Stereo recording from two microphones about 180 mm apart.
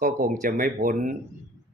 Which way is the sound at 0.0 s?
50° right (ahead or behind).